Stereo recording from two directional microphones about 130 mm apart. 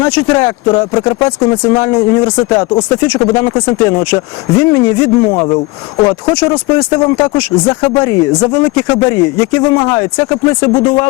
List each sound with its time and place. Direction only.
0.0 s speech: 25° left (ahead or behind)
8.9 s speech: 35° left (ahead or behind)
9.1 s speech: 25° left (ahead or behind)